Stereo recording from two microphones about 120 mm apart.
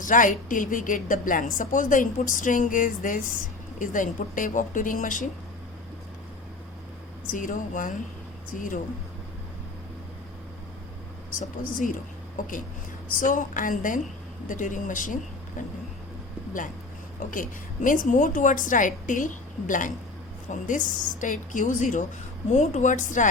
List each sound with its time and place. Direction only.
0.0 s a woman's voice: 90° left
7.3 s a woman's voice: 90° left
11.3 s a woman's voice: 90° left
13.1 s a woman's voice: 90° left
17.8 s a woman's voice: 90° left